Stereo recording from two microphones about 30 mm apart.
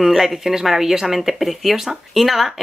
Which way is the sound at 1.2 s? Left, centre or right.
Centre.